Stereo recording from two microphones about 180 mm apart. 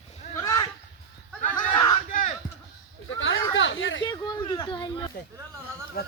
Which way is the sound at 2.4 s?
25° left (ahead or behind).